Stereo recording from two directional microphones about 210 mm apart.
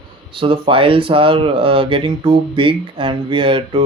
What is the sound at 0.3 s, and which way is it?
Speech, 25° right (ahead or behind).